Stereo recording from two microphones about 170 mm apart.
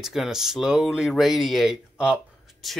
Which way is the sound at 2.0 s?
5° right (ahead or behind).